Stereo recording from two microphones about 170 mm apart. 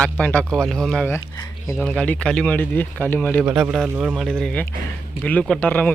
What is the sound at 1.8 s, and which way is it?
Speech, 5° left (ahead or behind).